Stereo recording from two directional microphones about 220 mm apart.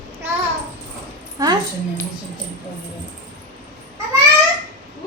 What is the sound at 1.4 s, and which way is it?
Speech, 15° right (ahead or behind).